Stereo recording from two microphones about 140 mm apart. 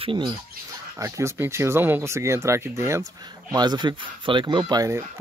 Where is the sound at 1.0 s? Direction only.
20° right (ahead or behind).